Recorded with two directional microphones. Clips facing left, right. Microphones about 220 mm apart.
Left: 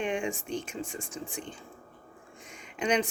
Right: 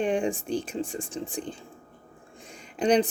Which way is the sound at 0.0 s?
35° right (ahead or behind).